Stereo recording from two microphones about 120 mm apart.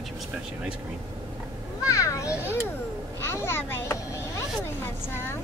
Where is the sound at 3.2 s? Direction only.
20° left (ahead or behind).